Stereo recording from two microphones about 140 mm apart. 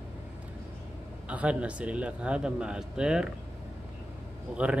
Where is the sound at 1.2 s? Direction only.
10° right (ahead or behind).